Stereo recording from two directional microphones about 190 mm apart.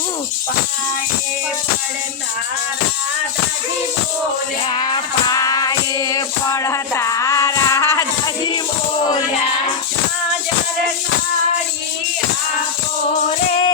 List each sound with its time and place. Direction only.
4.7 s music: 25° left (ahead or behind)